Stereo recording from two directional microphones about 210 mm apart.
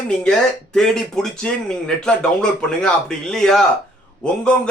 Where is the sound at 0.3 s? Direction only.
Centre (ahead or behind).